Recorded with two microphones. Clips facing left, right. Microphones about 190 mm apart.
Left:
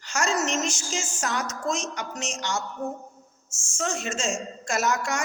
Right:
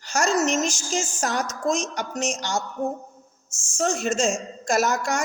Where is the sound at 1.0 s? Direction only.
35° right (ahead or behind).